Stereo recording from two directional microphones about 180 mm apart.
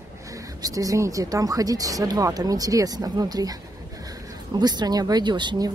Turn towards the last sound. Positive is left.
turn(degrees=-25)  # may be behind; listen again after turning